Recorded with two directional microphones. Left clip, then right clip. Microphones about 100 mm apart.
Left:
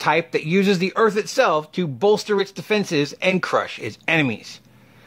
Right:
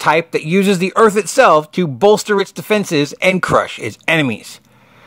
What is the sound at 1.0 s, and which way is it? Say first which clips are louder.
Speech: right 8 dB; 55° right (ahead or behind).